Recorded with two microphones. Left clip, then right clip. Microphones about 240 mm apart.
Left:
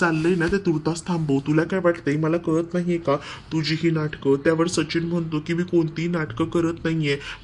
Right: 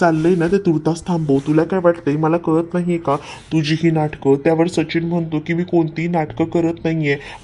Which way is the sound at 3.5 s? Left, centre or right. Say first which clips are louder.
Right 6 dB; right.